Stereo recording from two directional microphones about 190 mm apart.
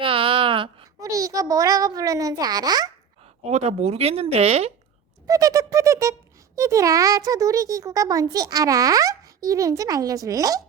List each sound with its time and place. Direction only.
0.0 s a child's voice: 30° right (ahead or behind)
3.5 s speech: 35° right (ahead or behind)
5.2 s speech: 20° right (ahead or behind)